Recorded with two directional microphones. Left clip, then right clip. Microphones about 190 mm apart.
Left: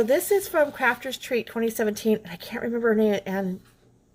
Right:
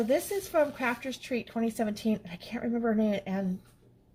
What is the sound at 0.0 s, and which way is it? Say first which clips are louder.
A woman's voice: left 7 dB; 40° left (ahead or behind).